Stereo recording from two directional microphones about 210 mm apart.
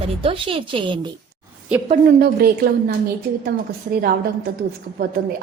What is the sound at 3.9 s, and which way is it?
Speech, 45° right (ahead or behind).